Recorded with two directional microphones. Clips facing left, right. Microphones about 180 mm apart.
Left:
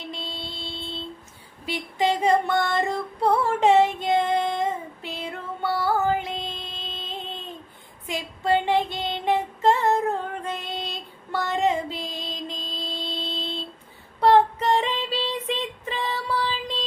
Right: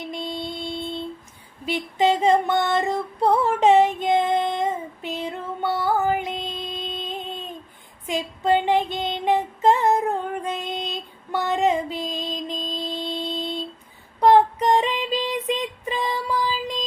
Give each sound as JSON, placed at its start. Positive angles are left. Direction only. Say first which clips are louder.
{"t": 0.1, "sound": "a sound", "louder": "right 6 dB", "side_deg": -15}
{"t": 1.6, "sound": "female singing", "louder": "right 4 dB", "side_deg": -20}
{"t": 8.0, "sound": "child singing", "louder": "right 3 dB", "side_deg": -20}